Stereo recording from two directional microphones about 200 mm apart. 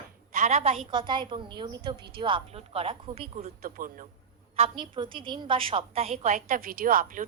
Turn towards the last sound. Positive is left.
turn(degrees=-45)  # may be behind; listen again after turning